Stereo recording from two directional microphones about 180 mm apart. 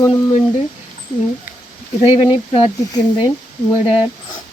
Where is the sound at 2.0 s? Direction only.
35° left (ahead or behind).